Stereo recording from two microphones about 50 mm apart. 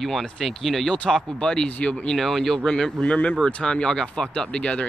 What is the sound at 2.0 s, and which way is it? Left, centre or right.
Speech, centre.